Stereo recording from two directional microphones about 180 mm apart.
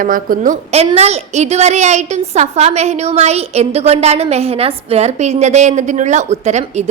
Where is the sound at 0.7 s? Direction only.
35° right (ahead or behind).